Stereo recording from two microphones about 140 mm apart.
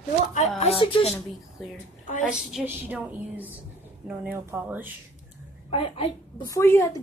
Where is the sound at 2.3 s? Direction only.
5° right (ahead or behind).